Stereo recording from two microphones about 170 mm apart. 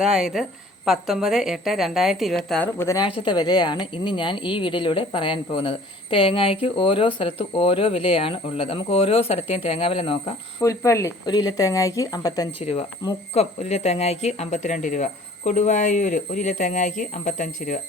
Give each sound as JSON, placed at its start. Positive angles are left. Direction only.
{"t": 0.0, "sound": "a woman's voice", "side_deg": -5}
{"t": 10.6, "sound": "speech", "side_deg": 20}
{"t": 12.5, "sound": "a woman's voice", "side_deg": 35}